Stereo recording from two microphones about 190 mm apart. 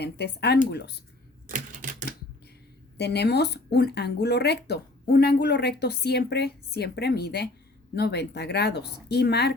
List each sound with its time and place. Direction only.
0.0 s speech: 60° left (ahead or behind)
1.5 s typewriter: 45° right (ahead or behind)
3.0 s speech: 60° left (ahead or behind)